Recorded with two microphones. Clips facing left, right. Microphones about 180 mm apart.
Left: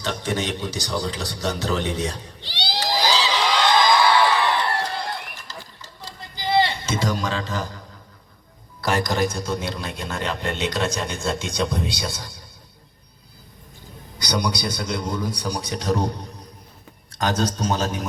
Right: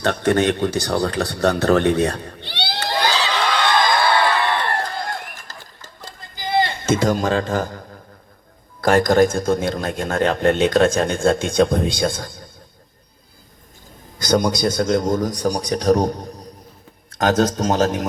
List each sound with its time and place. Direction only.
0.0 s a sound: 60° right (ahead or behind)
8.8 s a man's voice: 50° right (ahead or behind)
14.2 s a man's voice: 45° right (ahead or behind)